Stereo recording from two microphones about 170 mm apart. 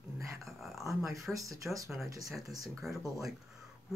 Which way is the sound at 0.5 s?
Centre (ahead or behind).